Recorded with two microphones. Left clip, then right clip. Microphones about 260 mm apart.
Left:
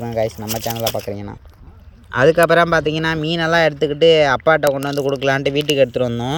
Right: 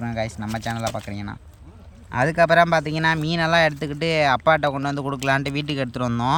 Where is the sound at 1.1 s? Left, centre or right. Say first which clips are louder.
Left 8 dB; right.